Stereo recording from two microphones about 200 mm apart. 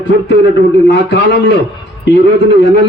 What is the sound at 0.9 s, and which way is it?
A man's voice, 60° left (ahead or behind).